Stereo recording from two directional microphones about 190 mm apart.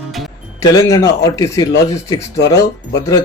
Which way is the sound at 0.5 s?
15° left (ahead or behind).